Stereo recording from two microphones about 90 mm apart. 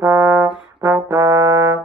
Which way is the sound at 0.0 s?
30° right (ahead or behind).